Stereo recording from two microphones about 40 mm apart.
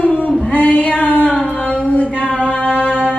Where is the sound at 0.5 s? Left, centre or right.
Left.